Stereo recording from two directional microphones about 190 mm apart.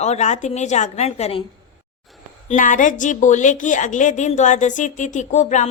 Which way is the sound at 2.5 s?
45° left (ahead or behind).